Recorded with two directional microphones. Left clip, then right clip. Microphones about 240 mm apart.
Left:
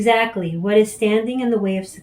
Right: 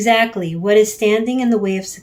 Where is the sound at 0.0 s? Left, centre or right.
Right.